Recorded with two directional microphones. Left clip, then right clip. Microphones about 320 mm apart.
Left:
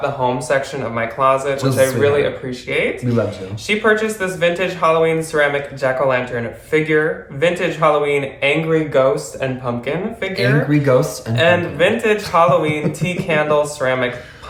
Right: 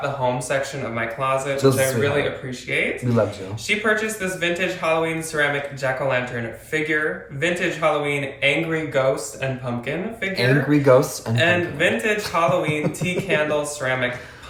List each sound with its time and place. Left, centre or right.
0.0 s speech: centre
1.5 s speech: centre
2.7 s speech: centre
10.3 s speech: centre
11.3 s speech: centre